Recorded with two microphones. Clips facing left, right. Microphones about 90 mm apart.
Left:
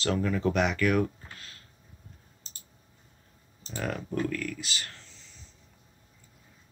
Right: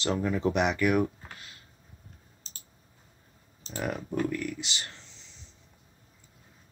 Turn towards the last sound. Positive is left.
turn(degrees=-25)  # may be behind; listen again after turning